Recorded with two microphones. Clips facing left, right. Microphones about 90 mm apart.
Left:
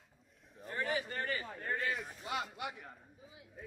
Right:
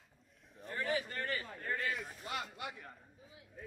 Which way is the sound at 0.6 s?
Centre (ahead or behind).